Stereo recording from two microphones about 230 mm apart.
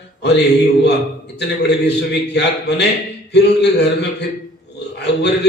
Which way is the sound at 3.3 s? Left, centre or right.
Left.